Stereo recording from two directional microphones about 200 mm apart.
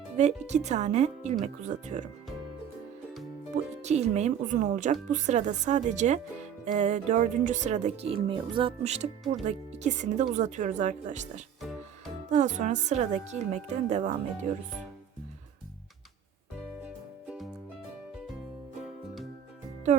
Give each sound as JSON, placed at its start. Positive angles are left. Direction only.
{"t": 0.2, "sound": "speech", "side_deg": -35}
{"t": 3.8, "sound": "speech", "side_deg": -35}
{"t": 17.2, "sound": "music", "side_deg": 0}